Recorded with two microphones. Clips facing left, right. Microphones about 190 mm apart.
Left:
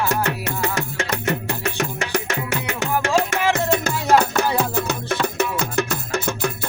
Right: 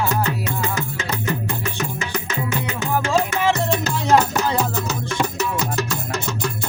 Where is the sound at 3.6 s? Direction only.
55° left (ahead or behind).